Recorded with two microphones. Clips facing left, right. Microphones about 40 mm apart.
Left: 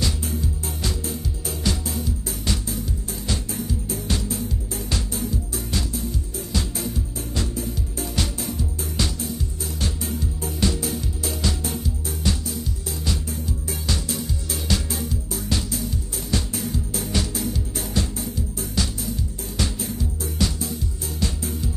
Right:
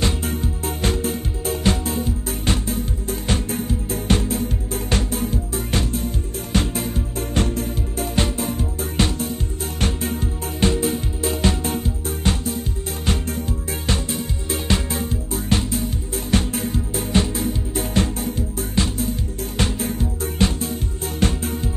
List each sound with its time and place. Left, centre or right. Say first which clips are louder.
0.0 s music: right 4 dB; right